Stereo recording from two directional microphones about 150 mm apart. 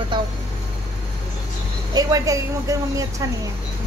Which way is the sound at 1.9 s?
25° right (ahead or behind).